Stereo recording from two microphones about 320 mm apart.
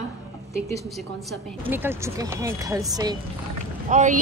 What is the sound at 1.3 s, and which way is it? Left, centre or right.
Speech, centre.